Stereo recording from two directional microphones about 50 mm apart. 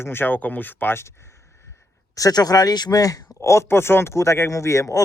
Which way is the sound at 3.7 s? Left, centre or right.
Left.